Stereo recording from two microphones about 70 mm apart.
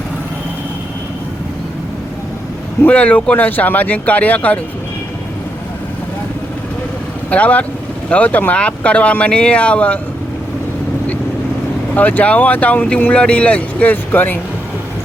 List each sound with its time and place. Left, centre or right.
2.8 s speech: centre
7.3 s speech: centre
11.9 s speech: left